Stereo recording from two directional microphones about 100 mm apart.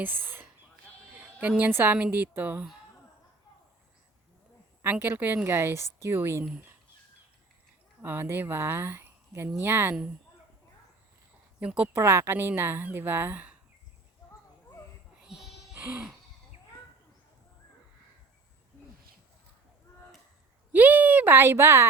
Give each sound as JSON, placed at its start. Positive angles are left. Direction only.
{"t": 0.0, "sound": "speech", "side_deg": -20}
{"t": 4.8, "sound": "speech", "side_deg": -20}
{"t": 8.0, "sound": "speech", "side_deg": -20}
{"t": 11.6, "sound": "speech", "side_deg": -15}
{"t": 11.9, "sound": "speech", "side_deg": -25}
{"t": 15.2, "sound": "music", "side_deg": -5}
{"t": 20.7, "sound": "speech", "side_deg": -15}